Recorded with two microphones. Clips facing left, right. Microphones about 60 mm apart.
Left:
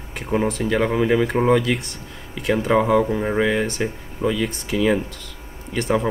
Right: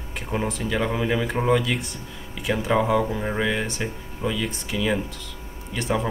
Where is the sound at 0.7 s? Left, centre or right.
Left.